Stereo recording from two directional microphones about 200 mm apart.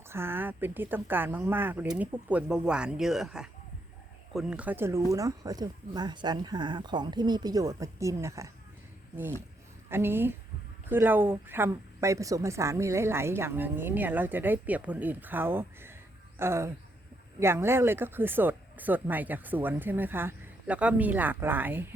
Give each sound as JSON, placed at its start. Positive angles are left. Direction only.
{"t": 0.1, "sound": "a woman's voice", "side_deg": -10}
{"t": 9.9, "sound": "a woman's voice", "side_deg": -10}